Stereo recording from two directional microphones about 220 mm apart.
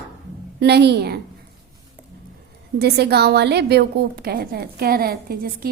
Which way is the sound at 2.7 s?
50° right (ahead or behind).